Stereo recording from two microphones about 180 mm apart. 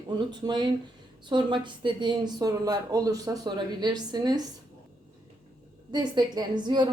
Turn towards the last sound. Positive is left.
turn(degrees=-25)  # may be behind; listen again after turning